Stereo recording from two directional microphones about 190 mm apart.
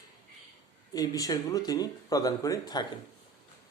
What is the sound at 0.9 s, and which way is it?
Speech, 20° left (ahead or behind).